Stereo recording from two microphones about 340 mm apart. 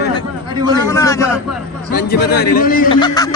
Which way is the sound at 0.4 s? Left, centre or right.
Centre.